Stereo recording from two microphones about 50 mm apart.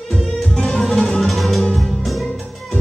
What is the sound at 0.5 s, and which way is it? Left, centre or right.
Music, centre.